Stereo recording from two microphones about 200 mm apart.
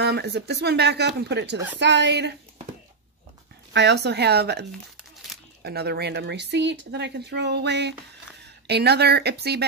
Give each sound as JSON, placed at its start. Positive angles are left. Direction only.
{"t": 0.0, "sound": "speech", "side_deg": -55}
{"t": 3.7, "sound": "speech", "side_deg": -60}